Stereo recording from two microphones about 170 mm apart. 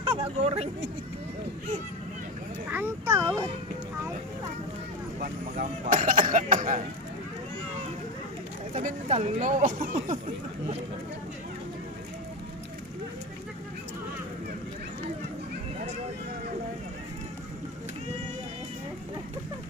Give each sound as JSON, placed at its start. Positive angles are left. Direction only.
{"t": 0.0, "sound": "speech", "side_deg": -35}
{"t": 2.7, "sound": "speech", "side_deg": -15}
{"t": 5.2, "sound": "speech", "side_deg": -55}
{"t": 8.7, "sound": "speech", "side_deg": -40}